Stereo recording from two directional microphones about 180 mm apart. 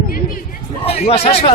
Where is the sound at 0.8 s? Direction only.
35° left (ahead or behind).